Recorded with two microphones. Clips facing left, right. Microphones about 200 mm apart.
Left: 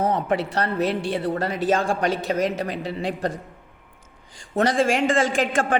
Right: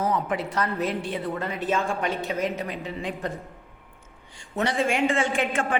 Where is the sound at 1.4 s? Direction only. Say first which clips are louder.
Left 3 dB; 85° left.